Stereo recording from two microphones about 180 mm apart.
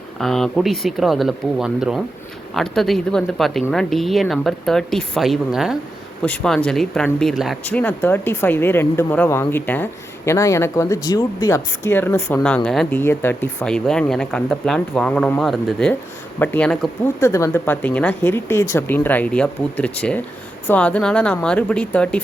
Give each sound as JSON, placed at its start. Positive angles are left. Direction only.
{"t": 0.2, "sound": "speech", "side_deg": 0}
{"t": 17.2, "sound": "speech", "side_deg": 15}